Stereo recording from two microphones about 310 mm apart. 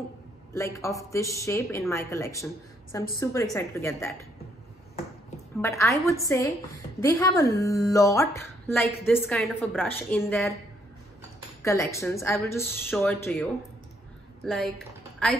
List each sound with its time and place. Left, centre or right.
0.6 s a woman's voice: centre
5.6 s a woman's voice: centre
11.6 s a woman's voice: centre